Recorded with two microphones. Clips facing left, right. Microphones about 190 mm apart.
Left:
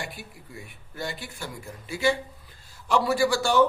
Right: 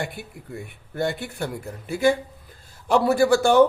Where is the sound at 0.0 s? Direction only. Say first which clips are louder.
Right 6 dB; 55° right (ahead or behind).